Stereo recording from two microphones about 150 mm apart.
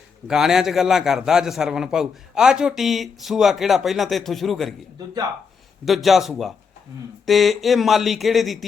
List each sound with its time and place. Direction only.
0.3 s a man's voice: 5° right (ahead or behind)
5.8 s a man's voice: centre (ahead or behind)